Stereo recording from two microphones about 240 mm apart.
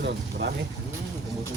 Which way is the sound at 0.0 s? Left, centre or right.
Right.